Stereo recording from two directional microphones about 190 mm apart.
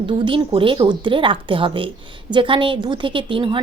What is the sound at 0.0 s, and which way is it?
A woman's voice, 25° right (ahead or behind).